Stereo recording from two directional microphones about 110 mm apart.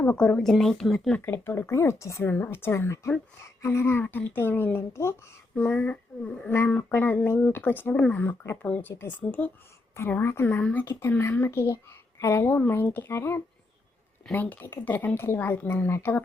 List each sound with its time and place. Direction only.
0.2 s speech: 5° left (ahead or behind)
1.2 s speech: 20° left (ahead or behind)